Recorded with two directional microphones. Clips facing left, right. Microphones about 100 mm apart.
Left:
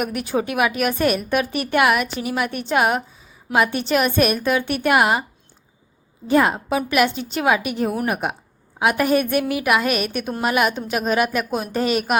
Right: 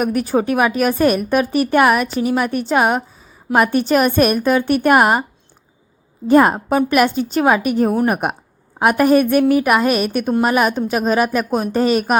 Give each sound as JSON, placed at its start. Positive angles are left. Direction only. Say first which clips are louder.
{"t": 0.0, "sound": "a woman's voice", "louder": "right 5 dB", "side_deg": -35}
{"t": 6.2, "sound": "a woman's voice", "louder": "right 5 dB", "side_deg": -45}